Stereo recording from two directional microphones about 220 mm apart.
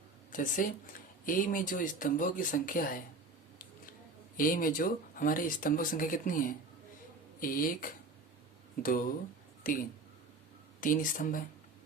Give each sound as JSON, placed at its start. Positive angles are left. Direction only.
{"t": 0.3, "sound": "speech", "side_deg": 35}
{"t": 4.4, "sound": "speech", "side_deg": 40}